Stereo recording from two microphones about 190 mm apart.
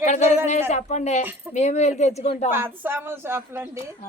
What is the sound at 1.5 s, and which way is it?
Speech, 35° left (ahead or behind).